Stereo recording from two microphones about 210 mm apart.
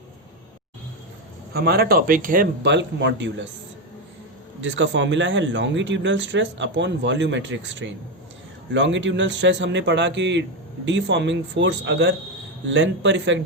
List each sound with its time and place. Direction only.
1.5 s speech: 50° right (ahead or behind)
4.6 s speech: 65° right (ahead or behind)